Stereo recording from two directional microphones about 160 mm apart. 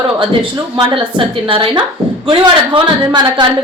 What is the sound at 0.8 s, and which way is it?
A woman's voice, 30° right (ahead or behind).